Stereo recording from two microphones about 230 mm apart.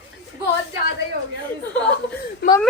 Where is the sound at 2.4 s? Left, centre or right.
Left.